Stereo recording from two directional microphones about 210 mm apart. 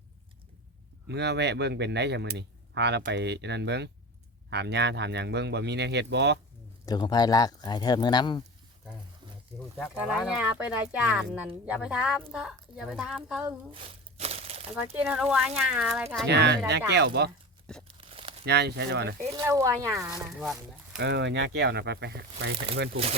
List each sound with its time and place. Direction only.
1.0 s speech: 55° right (ahead or behind)
6.8 s speech: 20° left (ahead or behind)
9.9 s speech: 5° right (ahead or behind)
14.2 s a sound: 30° right (ahead or behind)
14.9 s speech: 5° right (ahead or behind)
16.2 s speech: 55° right (ahead or behind)
17.9 s crumpling: 25° right (ahead or behind)
18.4 s speech: 50° right (ahead or behind)
19.4 s speech: 15° right (ahead or behind)
20.3 s speech: centre (ahead or behind)
21.0 s speech: 55° right (ahead or behind)